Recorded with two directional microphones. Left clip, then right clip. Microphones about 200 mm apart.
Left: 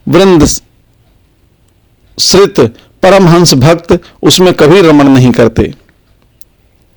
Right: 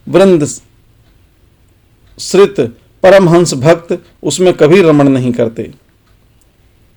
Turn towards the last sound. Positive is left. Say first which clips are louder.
# left 7 dB
turn(degrees=45)  # may be behind; listen again after turning